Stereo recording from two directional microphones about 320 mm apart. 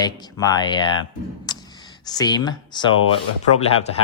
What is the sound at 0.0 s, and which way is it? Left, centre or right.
Speech, centre.